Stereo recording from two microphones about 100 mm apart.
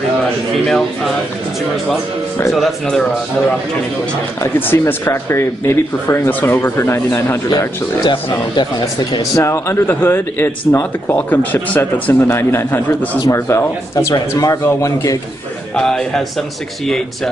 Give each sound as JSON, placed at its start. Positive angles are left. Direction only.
{"t": 0.7, "sound": "a man's voice", "side_deg": 5}
{"t": 2.5, "sound": "a man's voice", "side_deg": 0}
{"t": 4.4, "sound": "speech", "side_deg": 20}
{"t": 7.4, "sound": "speech", "side_deg": 45}
{"t": 9.3, "sound": "speech", "side_deg": 25}
{"t": 13.2, "sound": "speech", "side_deg": 30}
{"t": 15.7, "sound": "a man's voice", "side_deg": 5}